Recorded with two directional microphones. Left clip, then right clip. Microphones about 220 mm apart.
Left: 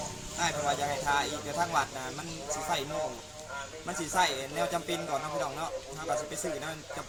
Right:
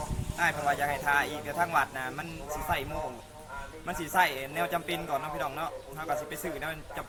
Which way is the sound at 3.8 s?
15° right (ahead or behind).